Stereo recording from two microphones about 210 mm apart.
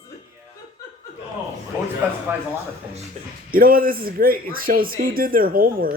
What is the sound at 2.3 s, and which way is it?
Speech, 10° right (ahead or behind).